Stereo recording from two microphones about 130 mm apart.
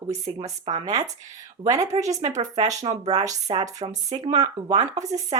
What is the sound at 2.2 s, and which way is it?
Speech, 65° right (ahead or behind).